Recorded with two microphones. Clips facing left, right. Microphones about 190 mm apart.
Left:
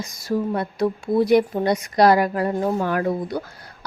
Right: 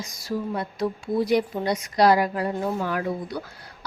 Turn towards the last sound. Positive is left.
turn(degrees=50)  # may be behind; listen again after turning